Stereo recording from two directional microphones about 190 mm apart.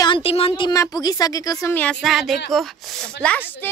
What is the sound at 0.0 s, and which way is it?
Speech, 25° left (ahead or behind).